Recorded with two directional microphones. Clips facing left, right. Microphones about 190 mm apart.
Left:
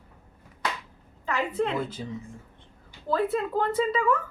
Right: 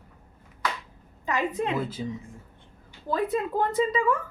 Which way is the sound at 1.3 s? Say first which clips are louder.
Even; 15° right (ahead or behind).